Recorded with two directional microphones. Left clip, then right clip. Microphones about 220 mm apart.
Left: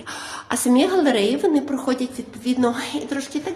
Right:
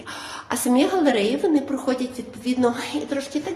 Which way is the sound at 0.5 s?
15° left (ahead or behind).